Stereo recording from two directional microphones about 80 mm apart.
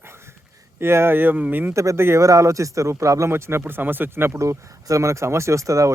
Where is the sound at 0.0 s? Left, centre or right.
Right.